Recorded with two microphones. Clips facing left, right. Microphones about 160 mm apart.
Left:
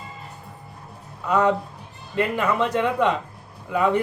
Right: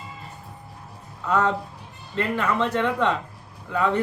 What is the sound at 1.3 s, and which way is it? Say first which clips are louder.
Speech: left 3 dB; 15° left (ahead or behind).